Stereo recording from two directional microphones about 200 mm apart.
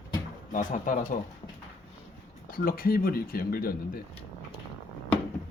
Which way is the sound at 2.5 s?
45° left (ahead or behind).